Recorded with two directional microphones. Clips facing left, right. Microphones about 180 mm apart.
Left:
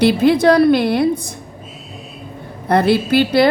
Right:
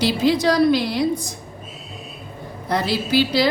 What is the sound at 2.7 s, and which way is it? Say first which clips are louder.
Speech: left 7 dB; 60° left (ahead or behind).